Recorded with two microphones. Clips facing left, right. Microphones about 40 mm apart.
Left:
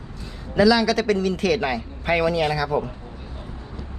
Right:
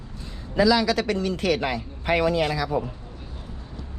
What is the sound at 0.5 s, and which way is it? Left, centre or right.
A man's voice, left.